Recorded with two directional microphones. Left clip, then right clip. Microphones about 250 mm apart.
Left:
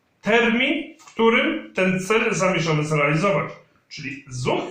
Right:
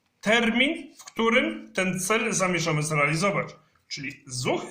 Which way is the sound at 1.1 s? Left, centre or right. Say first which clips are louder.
Left 5 dB; right.